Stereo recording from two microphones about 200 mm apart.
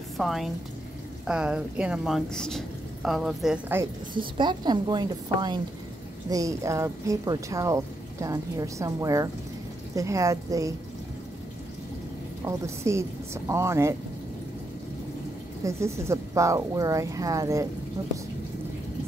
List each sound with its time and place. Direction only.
0.2 s a woman's voice: centre (ahead or behind)
4.1 s a woman's voice: 25° right (ahead or behind)
12.4 s speech: 15° right (ahead or behind)
15.6 s speech: 15° right (ahead or behind)